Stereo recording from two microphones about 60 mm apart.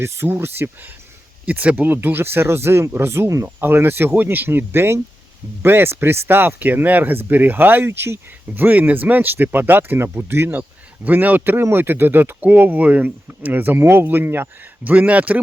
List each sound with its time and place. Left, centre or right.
0.3 s speech: right
1.5 s speech: right
1.7 s speech: right
3.4 s speech: right
10.5 s speech: right
14.6 s speech: right